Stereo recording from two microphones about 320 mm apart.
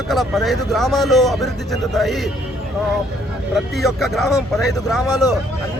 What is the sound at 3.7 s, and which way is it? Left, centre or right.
A man's voice, centre.